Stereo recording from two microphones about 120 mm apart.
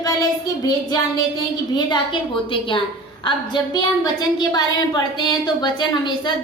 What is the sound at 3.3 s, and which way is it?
A woman's voice, 40° left (ahead or behind).